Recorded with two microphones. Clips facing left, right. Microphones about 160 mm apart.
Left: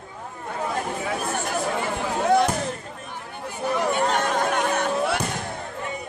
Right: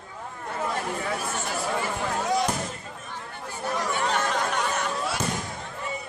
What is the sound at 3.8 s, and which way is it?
Chatter, 55° left (ahead or behind).